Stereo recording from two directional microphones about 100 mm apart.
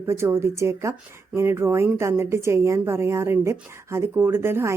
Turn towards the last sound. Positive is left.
turn(degrees=-25)  # may be behind; listen again after turning